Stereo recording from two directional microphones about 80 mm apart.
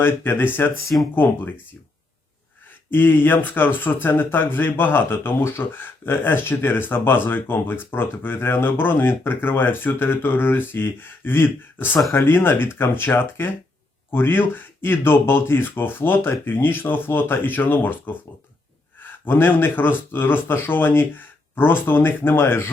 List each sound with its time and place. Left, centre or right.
0.0 s speech: left
2.9 s speech: left